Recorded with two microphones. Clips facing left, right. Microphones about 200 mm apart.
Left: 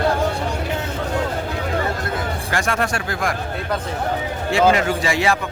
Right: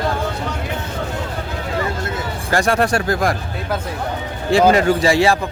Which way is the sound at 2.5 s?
35° right (ahead or behind).